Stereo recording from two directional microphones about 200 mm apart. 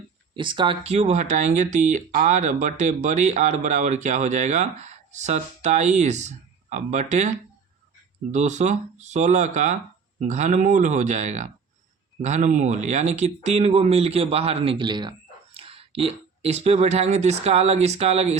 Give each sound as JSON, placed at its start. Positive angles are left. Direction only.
{"t": 0.3, "sound": "speech", "side_deg": -25}
{"t": 8.3, "sound": "speech", "side_deg": -35}